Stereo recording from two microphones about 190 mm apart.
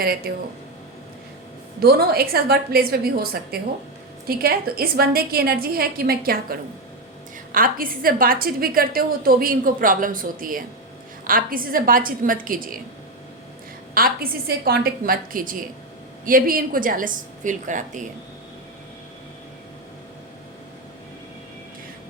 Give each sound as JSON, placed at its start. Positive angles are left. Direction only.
{"t": 0.0, "sound": "a woman's voice", "side_deg": -50}
{"t": 1.8, "sound": "a woman's voice", "side_deg": -55}
{"t": 7.5, "sound": "a woman's voice", "side_deg": -50}
{"t": 13.9, "sound": "a woman's voice", "side_deg": -50}